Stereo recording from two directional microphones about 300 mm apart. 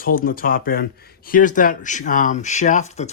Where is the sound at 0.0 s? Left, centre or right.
Left.